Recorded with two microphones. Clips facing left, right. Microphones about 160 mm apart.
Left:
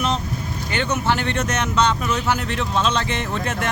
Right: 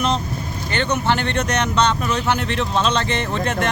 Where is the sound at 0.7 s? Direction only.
5° left (ahead or behind).